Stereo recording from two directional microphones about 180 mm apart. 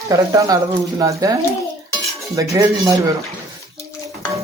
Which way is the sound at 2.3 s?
20° right (ahead or behind).